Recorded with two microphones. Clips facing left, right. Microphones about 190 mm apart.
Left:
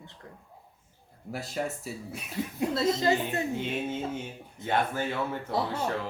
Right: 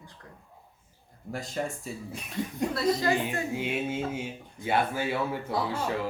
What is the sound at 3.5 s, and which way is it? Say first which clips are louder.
Speech: right 1 dB; 10° right (ahead or behind).